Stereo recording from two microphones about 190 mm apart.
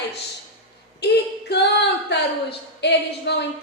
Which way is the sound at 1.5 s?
60° left (ahead or behind).